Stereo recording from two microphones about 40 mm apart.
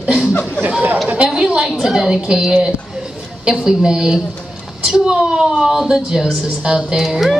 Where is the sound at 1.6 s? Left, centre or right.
Centre.